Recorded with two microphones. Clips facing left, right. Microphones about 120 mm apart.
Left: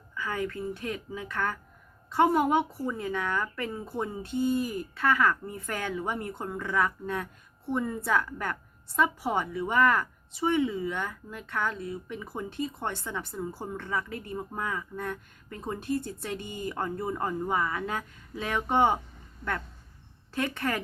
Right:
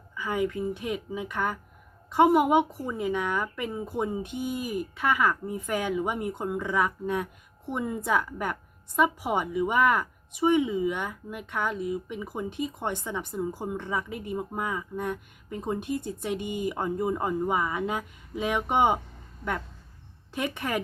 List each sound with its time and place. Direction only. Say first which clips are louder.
0.1 s a woman's voice: right 4 dB; 15° right (ahead or behind)
20.3 s a woman's voice: even; 15° right (ahead or behind)